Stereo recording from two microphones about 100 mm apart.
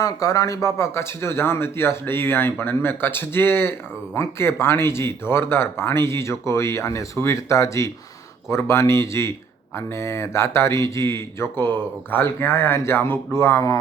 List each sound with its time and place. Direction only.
0.0 s speech: 35° left (ahead or behind)